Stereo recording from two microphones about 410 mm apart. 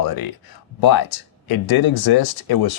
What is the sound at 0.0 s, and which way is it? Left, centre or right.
Speech, left.